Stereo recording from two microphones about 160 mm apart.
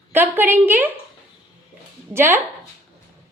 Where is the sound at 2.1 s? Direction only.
15° right (ahead or behind).